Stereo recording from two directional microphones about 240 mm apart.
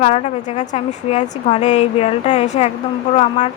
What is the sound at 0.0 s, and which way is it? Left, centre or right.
A woman's voice, left.